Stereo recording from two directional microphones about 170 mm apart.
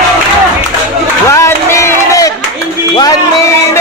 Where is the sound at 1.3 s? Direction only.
15° left (ahead or behind).